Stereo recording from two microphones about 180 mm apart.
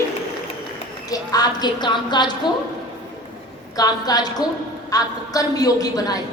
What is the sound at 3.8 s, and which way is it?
A woman's voice, 20° left (ahead or behind).